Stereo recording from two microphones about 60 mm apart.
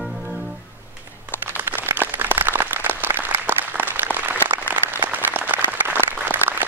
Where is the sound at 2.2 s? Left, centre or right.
Right.